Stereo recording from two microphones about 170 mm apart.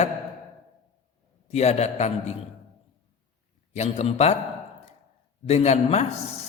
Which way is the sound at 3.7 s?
40° left (ahead or behind).